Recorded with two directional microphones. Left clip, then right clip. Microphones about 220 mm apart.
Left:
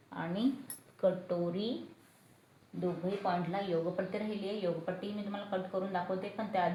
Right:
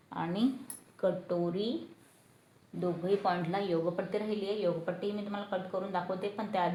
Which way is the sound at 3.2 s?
50° right (ahead or behind).